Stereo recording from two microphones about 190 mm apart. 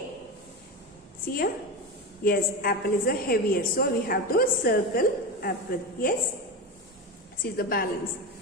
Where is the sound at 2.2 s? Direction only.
50° left (ahead or behind).